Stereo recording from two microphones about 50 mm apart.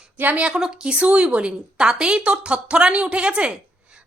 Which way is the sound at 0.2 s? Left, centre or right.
Right.